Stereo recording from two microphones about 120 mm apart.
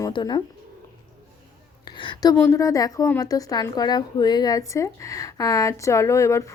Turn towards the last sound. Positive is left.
turn(degrees=25)  # may be behind; listen again after turning